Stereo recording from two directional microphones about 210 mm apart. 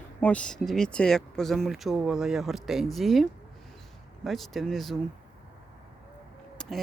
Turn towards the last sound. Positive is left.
turn(degrees=0)  # may be behind; listen again after turning